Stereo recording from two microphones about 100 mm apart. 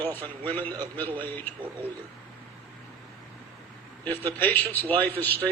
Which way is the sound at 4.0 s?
20° left (ahead or behind).